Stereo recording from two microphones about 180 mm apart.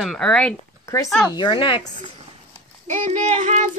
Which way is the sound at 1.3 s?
25° left (ahead or behind).